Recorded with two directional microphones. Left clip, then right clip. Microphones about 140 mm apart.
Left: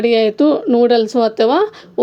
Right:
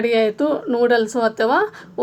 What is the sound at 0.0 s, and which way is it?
Speech, 40° left (ahead or behind).